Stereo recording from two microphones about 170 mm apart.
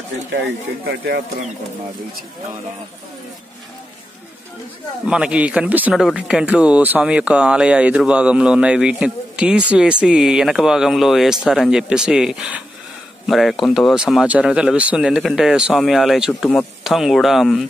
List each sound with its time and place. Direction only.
0.3 s speech: 80° right
5.0 s speech: 5° right (ahead or behind)